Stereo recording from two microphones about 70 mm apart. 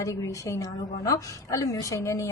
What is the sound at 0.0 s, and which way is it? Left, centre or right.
A woman's voice, left.